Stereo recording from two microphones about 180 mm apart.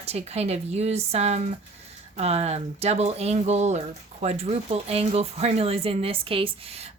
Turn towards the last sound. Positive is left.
turn(degrees=-30)  # may be behind; listen again after turning